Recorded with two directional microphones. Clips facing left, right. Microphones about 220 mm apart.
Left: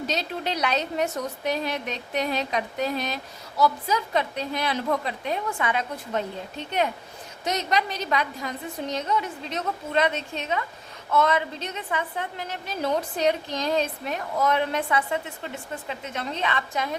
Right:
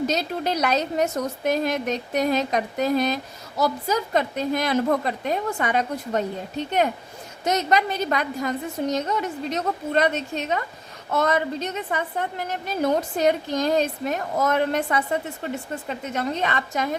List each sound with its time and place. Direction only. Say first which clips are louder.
0.1 s a woman's voice: right 4 dB; 45° right (ahead or behind)
7.4 s a woman's voice: right 4 dB; 45° right (ahead or behind)